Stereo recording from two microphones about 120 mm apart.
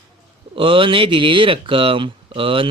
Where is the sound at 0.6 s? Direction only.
45° right (ahead or behind).